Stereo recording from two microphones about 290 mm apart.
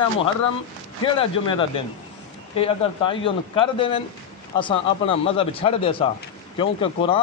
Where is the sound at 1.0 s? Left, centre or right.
Centre.